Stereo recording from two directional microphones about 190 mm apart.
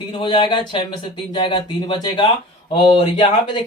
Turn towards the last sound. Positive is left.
turn(degrees=25)  # may be behind; listen again after turning